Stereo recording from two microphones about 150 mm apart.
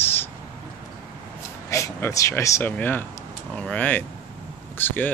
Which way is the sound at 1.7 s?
20° left (ahead or behind).